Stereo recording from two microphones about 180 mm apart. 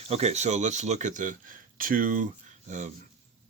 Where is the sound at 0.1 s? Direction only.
35° right (ahead or behind).